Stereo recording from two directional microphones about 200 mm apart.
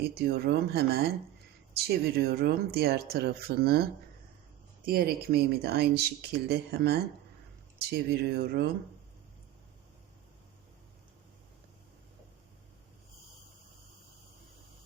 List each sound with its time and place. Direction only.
0.1 s speech: 50° right (ahead or behind)
4.9 s speech: 50° right (ahead or behind)